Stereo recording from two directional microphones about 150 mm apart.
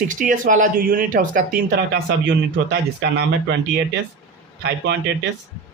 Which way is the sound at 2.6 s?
90° right.